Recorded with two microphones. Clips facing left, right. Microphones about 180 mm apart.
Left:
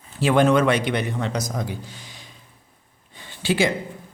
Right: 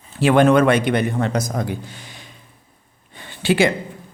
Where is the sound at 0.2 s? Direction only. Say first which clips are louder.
Right 4 dB; 60° right (ahead or behind).